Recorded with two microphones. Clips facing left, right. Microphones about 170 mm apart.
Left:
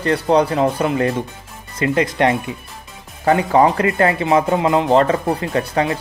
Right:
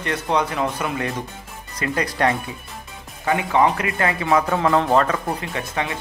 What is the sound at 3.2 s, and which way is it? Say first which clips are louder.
Speech: left 5 dB; 40° left (ahead or behind).